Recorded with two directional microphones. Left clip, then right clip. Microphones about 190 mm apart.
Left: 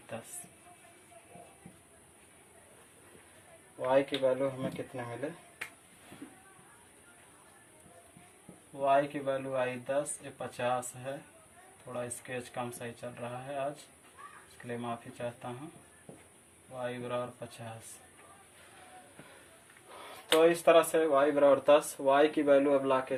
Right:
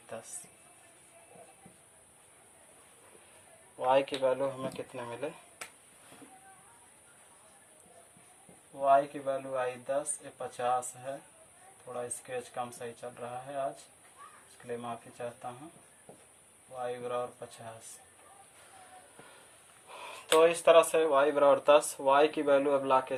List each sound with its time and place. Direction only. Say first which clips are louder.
3.8 s speech: right 1 dB; 35° right (ahead or behind)
8.8 s speech: right 2 dB; 10° right (ahead or behind)
14.7 s speech: even; 10° right (ahead or behind)
16.8 s speech: right 1 dB; 10° right (ahead or behind)
20.4 s speech: right 1 dB; 35° right (ahead or behind)